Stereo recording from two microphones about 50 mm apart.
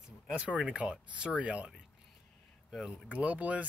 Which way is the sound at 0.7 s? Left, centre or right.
Right.